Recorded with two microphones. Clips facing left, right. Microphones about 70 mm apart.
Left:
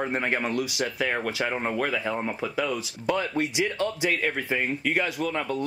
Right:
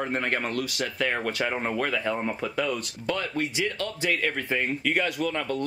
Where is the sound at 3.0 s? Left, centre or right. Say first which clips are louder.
Left 3 dB; centre.